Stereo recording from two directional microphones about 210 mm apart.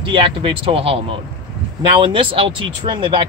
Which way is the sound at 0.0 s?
25° right (ahead or behind).